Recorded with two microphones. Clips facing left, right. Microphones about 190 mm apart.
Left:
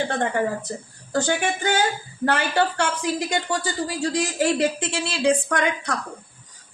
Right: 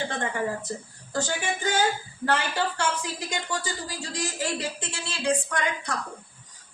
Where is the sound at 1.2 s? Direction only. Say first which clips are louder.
Left 5 dB; 70° left (ahead or behind).